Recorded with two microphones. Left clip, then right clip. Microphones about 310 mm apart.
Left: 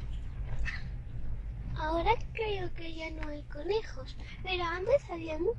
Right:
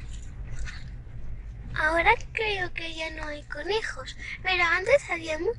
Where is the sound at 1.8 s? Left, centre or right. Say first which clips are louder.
Right 9 dB; right.